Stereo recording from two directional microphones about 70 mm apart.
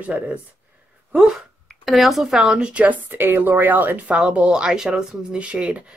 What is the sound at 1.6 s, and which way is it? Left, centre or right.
Speech, centre.